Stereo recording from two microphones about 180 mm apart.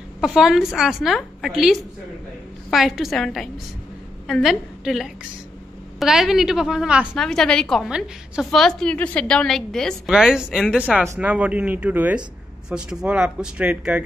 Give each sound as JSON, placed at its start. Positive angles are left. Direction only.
{"t": 0.2, "sound": "a woman's voice", "side_deg": 0}
{"t": 2.7, "sound": "a woman's voice", "side_deg": 0}